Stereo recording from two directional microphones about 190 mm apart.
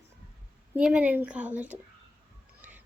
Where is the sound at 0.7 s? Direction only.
5° right (ahead or behind).